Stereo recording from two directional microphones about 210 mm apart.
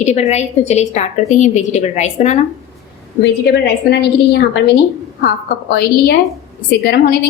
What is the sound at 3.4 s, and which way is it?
A woman's voice, 50° left (ahead or behind).